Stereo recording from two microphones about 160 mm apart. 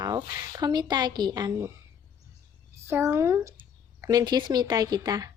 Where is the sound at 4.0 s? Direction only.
25° right (ahead or behind).